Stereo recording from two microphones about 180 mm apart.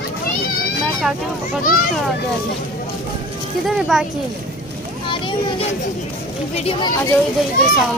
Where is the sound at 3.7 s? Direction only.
Centre (ahead or behind).